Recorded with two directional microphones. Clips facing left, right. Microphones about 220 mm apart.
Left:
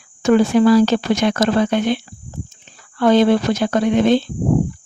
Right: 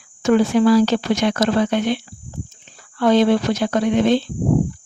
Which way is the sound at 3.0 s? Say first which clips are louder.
Left 2 dB; 50° left (ahead or behind).